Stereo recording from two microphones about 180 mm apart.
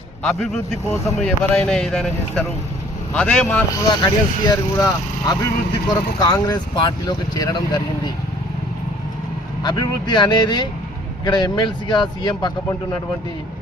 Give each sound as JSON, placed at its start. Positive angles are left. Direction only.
{"t": 0.2, "sound": "speech", "side_deg": 5}
{"t": 4.0, "sound": "speech", "side_deg": 20}
{"t": 9.6, "sound": "speech", "side_deg": 25}